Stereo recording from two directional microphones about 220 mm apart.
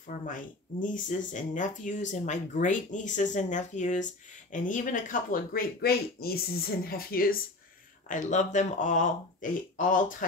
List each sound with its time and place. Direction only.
0.3 s speech: 35° left (ahead or behind)